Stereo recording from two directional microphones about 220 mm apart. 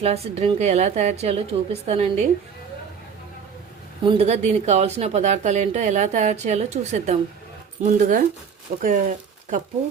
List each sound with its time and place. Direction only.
0.0 s a woman's voice: 25° right (ahead or behind)
4.0 s speech: 25° right (ahead or behind)